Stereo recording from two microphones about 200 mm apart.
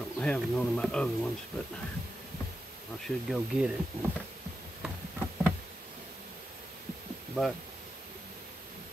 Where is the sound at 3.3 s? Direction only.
5° right (ahead or behind).